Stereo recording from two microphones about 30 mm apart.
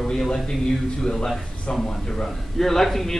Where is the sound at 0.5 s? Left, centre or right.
Left.